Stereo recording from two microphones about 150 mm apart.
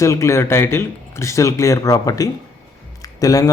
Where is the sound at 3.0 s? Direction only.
25° left (ahead or behind).